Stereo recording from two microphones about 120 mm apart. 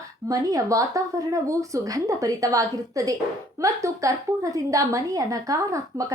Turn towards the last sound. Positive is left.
turn(degrees=-25)  # may be behind; listen again after turning